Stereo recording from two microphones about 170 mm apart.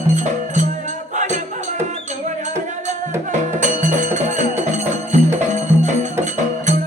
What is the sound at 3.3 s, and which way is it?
Music, 45° right (ahead or behind).